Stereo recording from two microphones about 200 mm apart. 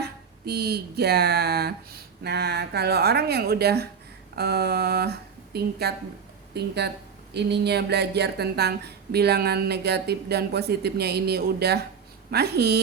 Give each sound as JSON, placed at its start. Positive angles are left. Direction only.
{"t": 0.0, "sound": "a woman's voice", "side_deg": -55}